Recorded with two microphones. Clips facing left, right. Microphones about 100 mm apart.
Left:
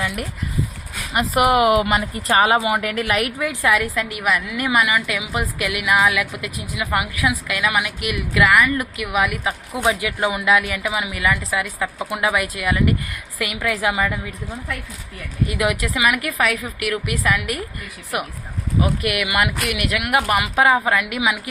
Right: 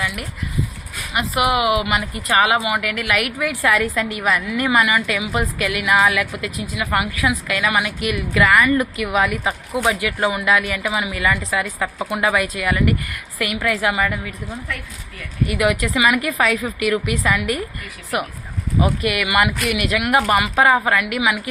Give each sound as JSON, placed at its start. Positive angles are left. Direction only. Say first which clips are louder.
{"t": 0.0, "sound": "speech", "louder": "left 1 dB", "side_deg": 40}
{"t": 3.3, "sound": "a woman's voice", "louder": "right 1 dB", "side_deg": 20}
{"t": 11.6, "sound": "speech", "louder": "right 1 dB", "side_deg": -5}
{"t": 12.2, "sound": "a woman's voice", "louder": "right 1 dB", "side_deg": 10}
{"t": 16.0, "sound": "a woman's voice", "louder": "right 1 dB", "side_deg": 5}
{"t": 18.8, "sound": "speech", "louder": "right 2 dB", "side_deg": 5}
{"t": 21.0, "sound": "a woman's voice", "louder": "right 2 dB", "side_deg": 20}